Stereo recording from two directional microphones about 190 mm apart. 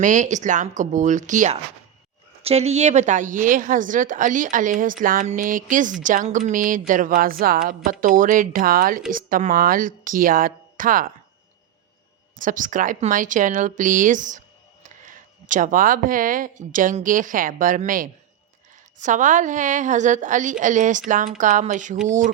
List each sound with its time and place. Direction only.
0.0 s a woman's voice: 40° right (ahead or behind)
12.4 s a woman's voice: 45° right (ahead or behind)